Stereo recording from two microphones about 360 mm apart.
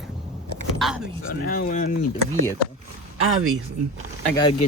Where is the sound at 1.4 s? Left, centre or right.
Left.